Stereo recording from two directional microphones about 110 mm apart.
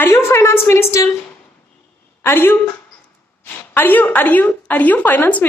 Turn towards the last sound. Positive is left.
turn(degrees=15)  # may be behind; listen again after turning